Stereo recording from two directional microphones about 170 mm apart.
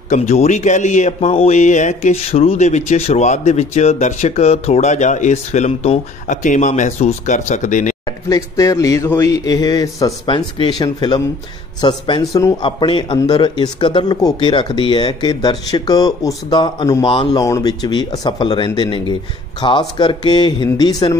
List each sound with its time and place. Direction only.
0.1 s a man's voice: 45° left (ahead or behind)
8.3 s a man's voice: 20° left (ahead or behind)